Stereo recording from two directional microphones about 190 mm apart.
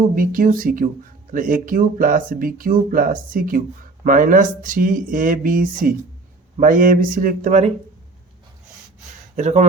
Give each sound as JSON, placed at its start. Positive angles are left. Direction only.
{"t": 0.2, "sound": "speech", "side_deg": -45}
{"t": 9.3, "sound": "speech", "side_deg": -35}